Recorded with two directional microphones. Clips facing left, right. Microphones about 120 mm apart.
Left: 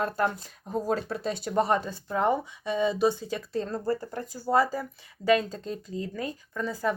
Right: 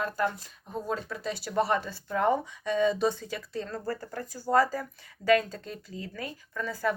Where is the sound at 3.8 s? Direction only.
20° left (ahead or behind).